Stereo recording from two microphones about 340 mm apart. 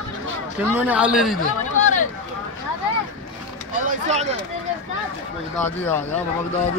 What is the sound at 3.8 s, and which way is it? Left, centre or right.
Speech, centre.